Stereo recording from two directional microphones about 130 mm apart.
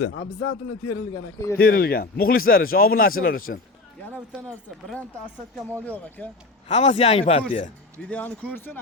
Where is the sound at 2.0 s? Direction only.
90° left.